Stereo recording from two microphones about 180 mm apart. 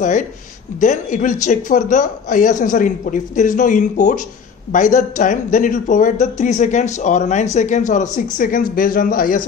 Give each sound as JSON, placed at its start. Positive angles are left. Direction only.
{"t": 0.7, "sound": "speech", "side_deg": 45}